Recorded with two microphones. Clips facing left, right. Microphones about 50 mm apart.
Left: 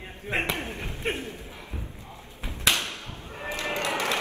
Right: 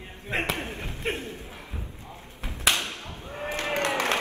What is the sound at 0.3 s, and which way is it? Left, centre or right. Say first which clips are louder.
Chop: even; centre.